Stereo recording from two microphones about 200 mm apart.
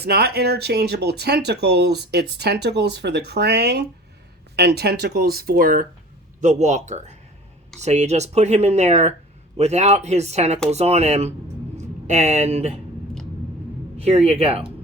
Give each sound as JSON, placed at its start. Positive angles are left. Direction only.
{"t": 0.0, "sound": "speech", "side_deg": -55}
{"t": 13.9, "sound": "speech", "side_deg": -30}